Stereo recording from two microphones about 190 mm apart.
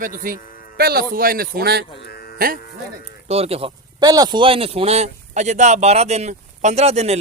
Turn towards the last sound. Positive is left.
turn(degrees=-35)  # may be behind; listen again after turning